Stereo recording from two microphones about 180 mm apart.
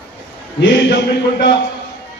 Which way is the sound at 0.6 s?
85° left.